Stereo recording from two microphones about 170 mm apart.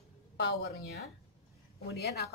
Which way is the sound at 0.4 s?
75° left (ahead or behind).